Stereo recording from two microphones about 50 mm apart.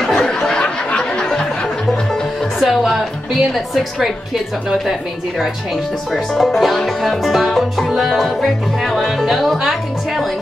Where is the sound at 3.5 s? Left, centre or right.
Centre.